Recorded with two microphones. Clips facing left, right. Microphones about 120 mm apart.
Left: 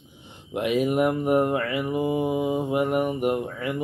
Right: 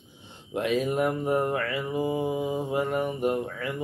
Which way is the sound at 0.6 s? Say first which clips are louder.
Left 3 dB; 15° left (ahead or behind).